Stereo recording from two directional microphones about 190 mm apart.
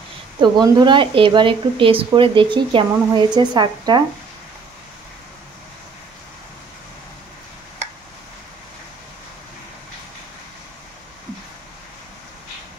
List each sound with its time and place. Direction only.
0.4 s speech: 25° right (ahead or behind)